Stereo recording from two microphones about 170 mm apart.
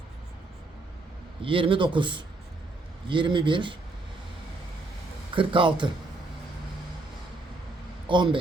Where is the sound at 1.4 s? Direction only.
30° right (ahead or behind).